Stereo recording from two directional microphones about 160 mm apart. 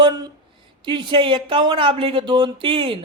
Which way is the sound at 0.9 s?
30° right (ahead or behind).